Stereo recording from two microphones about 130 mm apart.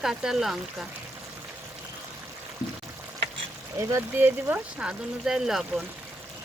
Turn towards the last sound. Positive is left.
turn(degrees=-5)  # may be behind; listen again after turning